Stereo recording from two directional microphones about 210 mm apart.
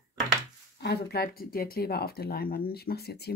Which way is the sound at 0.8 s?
50° left (ahead or behind).